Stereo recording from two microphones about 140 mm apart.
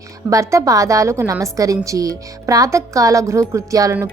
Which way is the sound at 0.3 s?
20° right (ahead or behind).